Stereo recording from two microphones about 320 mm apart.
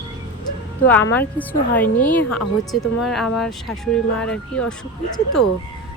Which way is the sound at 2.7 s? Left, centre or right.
Centre.